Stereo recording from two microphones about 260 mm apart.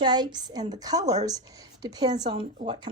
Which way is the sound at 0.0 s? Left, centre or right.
Centre.